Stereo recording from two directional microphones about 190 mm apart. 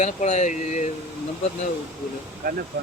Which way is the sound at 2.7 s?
60° right (ahead or behind).